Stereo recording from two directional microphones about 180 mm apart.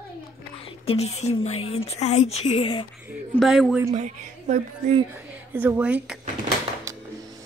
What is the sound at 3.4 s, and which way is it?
Speech, centre (ahead or behind).